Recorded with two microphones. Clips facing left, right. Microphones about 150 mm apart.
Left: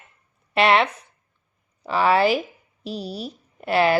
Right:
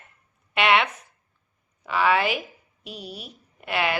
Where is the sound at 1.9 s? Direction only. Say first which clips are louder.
Left 4 dB; 35° left (ahead or behind).